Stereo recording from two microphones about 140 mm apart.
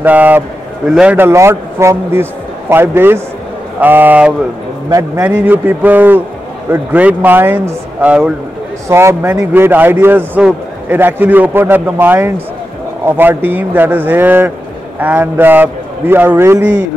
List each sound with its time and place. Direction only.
0.0 s a man's voice: 10° right (ahead or behind)
1.1 s a man's voice: 15° right (ahead or behind)
4.8 s speech: 25° right (ahead or behind)
5.2 s a man's voice: 15° right (ahead or behind)